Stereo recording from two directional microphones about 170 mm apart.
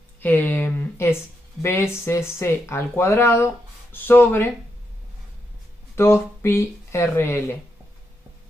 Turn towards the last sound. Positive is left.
turn(degrees=15)  # may be behind; listen again after turning